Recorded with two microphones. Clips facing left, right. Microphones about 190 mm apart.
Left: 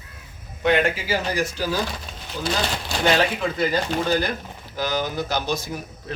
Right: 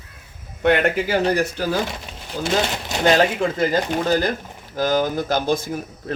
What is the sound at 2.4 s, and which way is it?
Speech, 20° right (ahead or behind).